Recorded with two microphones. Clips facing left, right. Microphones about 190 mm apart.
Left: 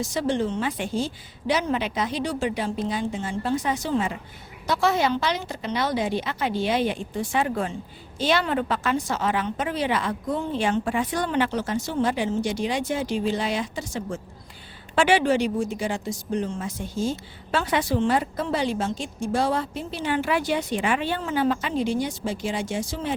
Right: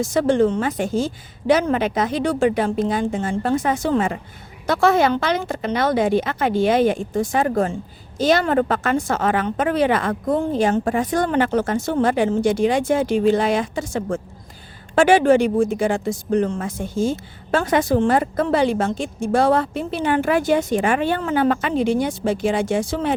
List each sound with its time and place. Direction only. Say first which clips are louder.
0.0 s a woman's voice: right 8 dB; 50° right (ahead or behind)